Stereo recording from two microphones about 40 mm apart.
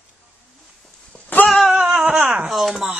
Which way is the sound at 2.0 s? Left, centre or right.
Right.